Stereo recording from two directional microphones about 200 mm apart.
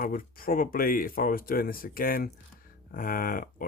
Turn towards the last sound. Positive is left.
turn(degrees=45)  # may be behind; listen again after turning